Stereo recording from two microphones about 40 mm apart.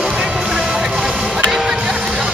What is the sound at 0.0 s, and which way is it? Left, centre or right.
Music, centre.